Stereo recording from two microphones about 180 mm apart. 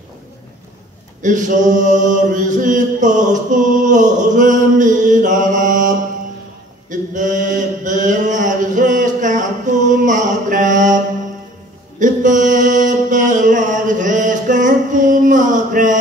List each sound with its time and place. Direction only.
1.2 s mantra: 45° right (ahead or behind)
12.0 s mantra: 45° right (ahead or behind)